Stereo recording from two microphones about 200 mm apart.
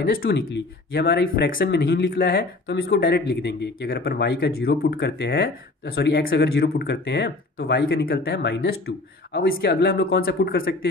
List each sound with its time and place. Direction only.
0.0 s speech: 50° left (ahead or behind)